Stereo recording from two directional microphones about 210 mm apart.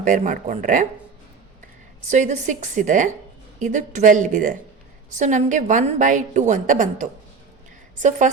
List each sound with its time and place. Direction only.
0.0 s a woman's voice: 35° right (ahead or behind)
2.0 s a woman's voice: 35° right (ahead or behind)